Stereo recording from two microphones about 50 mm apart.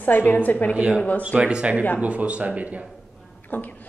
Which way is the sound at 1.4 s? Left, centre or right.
Right.